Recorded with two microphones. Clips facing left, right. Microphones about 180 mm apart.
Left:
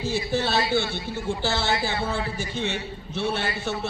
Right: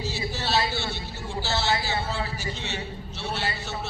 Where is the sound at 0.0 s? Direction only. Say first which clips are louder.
Left 6 dB; 55° left (ahead or behind).